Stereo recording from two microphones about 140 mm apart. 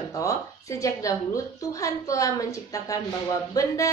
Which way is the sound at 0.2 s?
25° left (ahead or behind).